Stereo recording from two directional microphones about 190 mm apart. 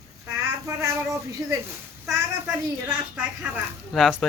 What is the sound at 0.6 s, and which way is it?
Speech, 15° right (ahead or behind).